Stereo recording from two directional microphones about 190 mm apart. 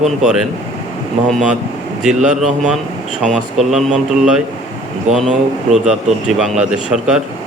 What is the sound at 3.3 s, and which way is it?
Speech, centre (ahead or behind).